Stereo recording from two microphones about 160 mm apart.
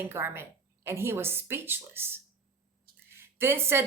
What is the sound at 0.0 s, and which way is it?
A woman's voice, 15° right (ahead or behind).